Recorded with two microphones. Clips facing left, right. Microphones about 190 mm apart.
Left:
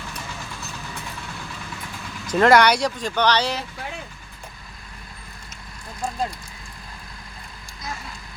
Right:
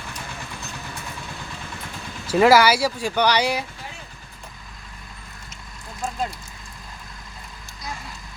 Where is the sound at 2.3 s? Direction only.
5° right (ahead or behind).